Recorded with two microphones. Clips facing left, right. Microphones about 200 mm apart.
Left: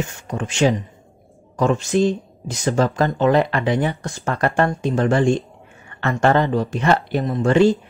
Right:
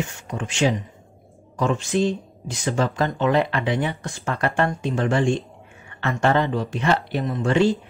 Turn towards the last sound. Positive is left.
turn(degrees=40)  # may be behind; listen again after turning